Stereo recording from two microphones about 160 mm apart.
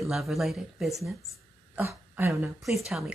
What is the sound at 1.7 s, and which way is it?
Speech, 15° right (ahead or behind).